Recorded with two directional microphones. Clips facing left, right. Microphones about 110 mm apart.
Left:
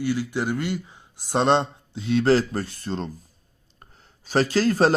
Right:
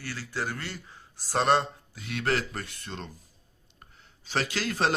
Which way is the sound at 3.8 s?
40° left (ahead or behind).